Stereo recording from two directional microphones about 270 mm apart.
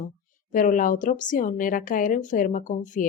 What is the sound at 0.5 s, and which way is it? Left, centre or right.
A woman's voice, left.